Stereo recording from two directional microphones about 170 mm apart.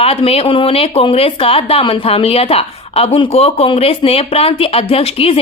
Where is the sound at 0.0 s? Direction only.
35° left (ahead or behind).